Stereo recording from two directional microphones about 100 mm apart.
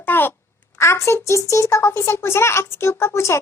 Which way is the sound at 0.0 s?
20° left (ahead or behind).